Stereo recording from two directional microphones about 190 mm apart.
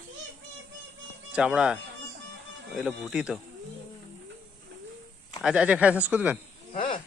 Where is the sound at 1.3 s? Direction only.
5° right (ahead or behind).